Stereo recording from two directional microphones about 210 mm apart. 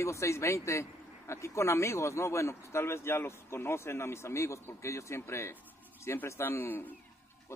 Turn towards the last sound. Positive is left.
turn(degrees=10)  # may be behind; listen again after turning